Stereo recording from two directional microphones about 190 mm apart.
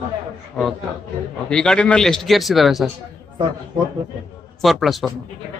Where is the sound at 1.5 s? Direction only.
5° left (ahead or behind).